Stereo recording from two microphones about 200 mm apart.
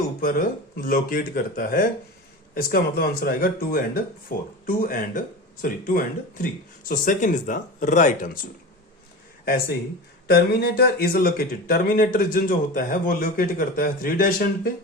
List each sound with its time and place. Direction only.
0.2 s speech: 45° left (ahead or behind)
10.2 s speech: 50° left (ahead or behind)